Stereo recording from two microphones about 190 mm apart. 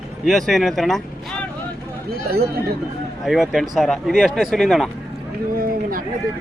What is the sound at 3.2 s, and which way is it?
Speech, centre (ahead or behind).